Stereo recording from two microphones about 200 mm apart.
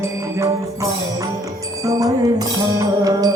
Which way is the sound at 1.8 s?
15° right (ahead or behind).